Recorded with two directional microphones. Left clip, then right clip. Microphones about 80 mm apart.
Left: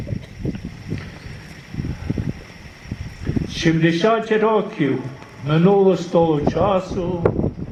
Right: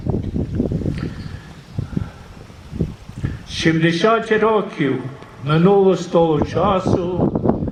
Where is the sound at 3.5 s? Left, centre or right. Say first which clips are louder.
Right 2 dB; right.